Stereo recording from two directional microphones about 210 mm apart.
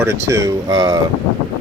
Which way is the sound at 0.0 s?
15° right (ahead or behind).